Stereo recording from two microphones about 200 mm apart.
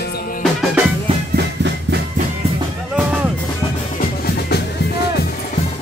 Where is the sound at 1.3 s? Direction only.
55° right (ahead or behind).